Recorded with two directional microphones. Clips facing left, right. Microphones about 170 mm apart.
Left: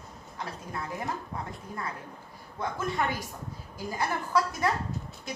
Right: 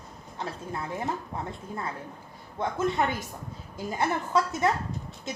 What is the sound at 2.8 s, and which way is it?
A woman's voice, 25° right (ahead or behind).